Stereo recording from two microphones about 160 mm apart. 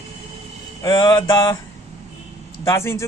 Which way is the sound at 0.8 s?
25° left (ahead or behind).